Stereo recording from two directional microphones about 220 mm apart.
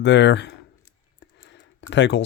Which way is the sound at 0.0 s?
50° left (ahead or behind).